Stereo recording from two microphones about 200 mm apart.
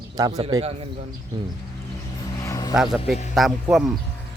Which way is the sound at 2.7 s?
Centre (ahead or behind).